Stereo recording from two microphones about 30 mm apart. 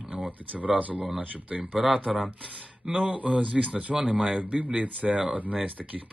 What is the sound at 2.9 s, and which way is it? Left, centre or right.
A man's voice, right.